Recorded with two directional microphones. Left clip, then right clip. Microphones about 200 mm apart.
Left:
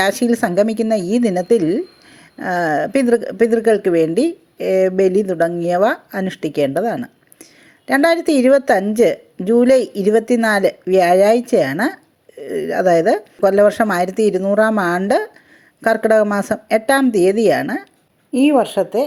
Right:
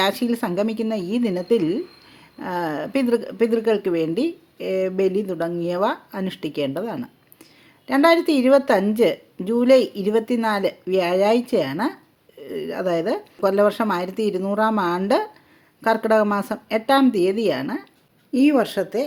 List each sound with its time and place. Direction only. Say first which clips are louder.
0.0 s a woman's voice: left 6 dB; 20° left (ahead or behind)
18.3 s a woman's voice: left 4 dB; 10° left (ahead or behind)